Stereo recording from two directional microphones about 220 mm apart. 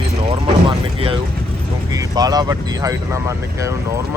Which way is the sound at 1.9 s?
15° right (ahead or behind).